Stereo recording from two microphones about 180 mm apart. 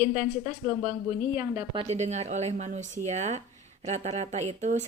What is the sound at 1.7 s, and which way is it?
Speech, 35° right (ahead or behind).